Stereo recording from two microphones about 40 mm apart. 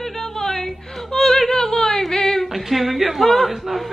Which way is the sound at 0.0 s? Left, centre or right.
Centre.